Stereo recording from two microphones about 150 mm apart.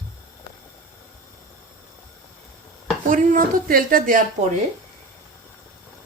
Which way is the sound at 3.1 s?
65° right (ahead or behind).